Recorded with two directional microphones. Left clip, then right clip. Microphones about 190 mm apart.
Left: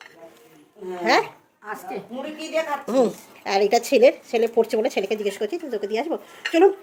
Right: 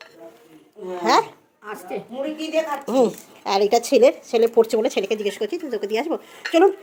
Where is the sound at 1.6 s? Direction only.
20° right (ahead or behind).